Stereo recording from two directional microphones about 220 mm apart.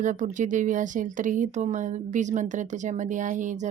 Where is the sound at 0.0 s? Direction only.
35° right (ahead or behind).